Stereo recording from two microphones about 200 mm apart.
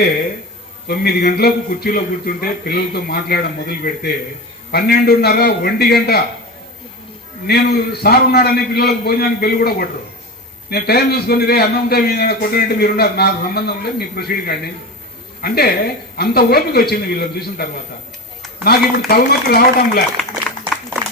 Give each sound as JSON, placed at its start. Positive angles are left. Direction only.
{"t": 0.9, "sound": "a man's voice", "side_deg": 50}
{"t": 4.7, "sound": "a man's voice", "side_deg": 50}
{"t": 7.4, "sound": "a man's voice", "side_deg": 50}